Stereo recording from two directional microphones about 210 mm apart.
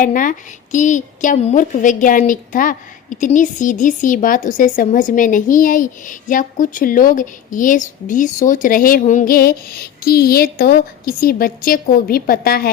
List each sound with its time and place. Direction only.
0.0 s a woman's voice: 40° left (ahead or behind)